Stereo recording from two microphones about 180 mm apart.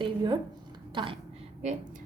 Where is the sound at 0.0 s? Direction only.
25° right (ahead or behind).